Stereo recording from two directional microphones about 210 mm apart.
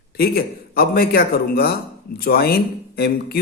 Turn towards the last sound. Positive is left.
turn(degrees=50)  # may be behind; listen again after turning